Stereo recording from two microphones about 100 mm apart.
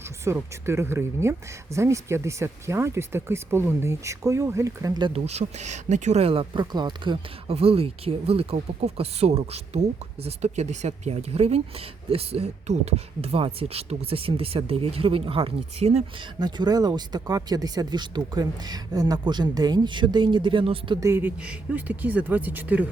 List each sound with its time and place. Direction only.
0.3 s speech: 25° right (ahead or behind)
5.1 s speech: 90° right
6.1 s speech: 70° right (ahead or behind); by 7.5 s 55° right (ahead or behind)
7.5 s speech: 75° right (ahead or behind)
16.4 s speech: 45° right (ahead or behind); by 21.0 s 60° right (ahead or behind)
21.0 s speech: 25° right (ahead or behind)